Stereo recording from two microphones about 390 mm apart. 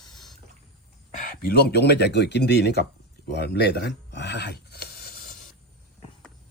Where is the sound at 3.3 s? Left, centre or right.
Left.